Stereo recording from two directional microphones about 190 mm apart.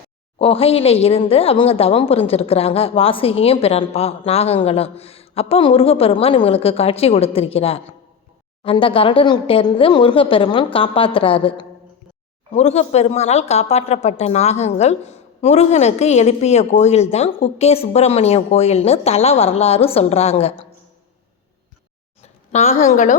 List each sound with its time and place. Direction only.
0.3 s speech: 30° left (ahead or behind)
22.2 s a woman's voice: 35° left (ahead or behind)